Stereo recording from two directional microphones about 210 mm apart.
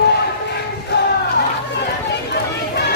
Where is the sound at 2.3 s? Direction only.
50° left (ahead or behind).